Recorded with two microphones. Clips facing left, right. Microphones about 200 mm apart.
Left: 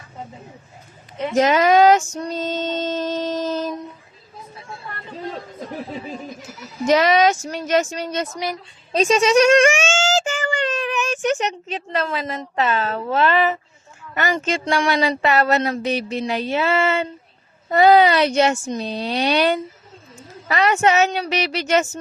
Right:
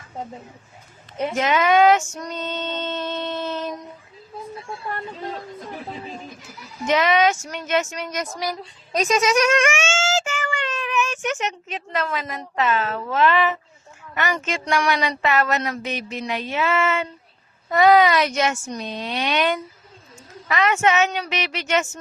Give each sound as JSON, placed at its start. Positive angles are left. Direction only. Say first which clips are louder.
{"t": 1.4, "sound": "female singing", "louder": "left 4 dB", "side_deg": 40}
{"t": 6.8, "sound": "speech", "louder": "left 3 dB", "side_deg": 40}